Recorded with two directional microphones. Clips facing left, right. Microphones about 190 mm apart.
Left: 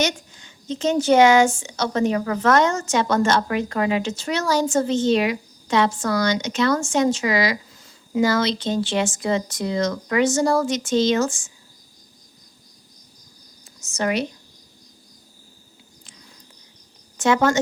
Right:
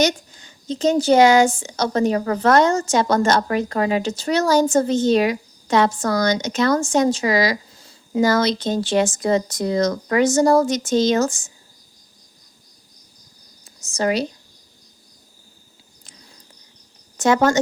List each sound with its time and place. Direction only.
0.0 s a woman's voice: 40° right (ahead or behind)
13.8 s a woman's voice: 35° right (ahead or behind)
17.2 s a woman's voice: 40° right (ahead or behind)